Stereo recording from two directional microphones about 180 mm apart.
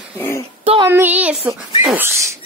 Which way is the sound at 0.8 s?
10° right (ahead or behind).